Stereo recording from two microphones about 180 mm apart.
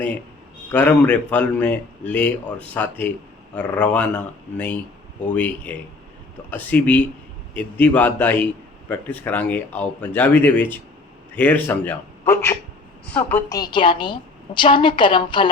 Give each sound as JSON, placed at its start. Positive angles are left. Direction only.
{"t": 0.7, "sound": "speech", "side_deg": 10}
{"t": 13.5, "sound": "a woman's voice", "side_deg": 25}